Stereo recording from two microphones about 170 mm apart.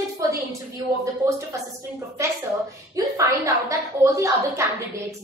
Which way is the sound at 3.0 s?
20° right (ahead or behind).